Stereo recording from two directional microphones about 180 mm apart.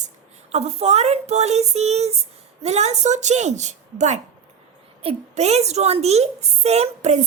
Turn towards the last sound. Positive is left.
turn(degrees=-40)  # may be behind; listen again after turning